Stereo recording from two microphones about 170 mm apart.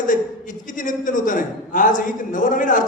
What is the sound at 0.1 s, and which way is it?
A man's voice, 50° left (ahead or behind).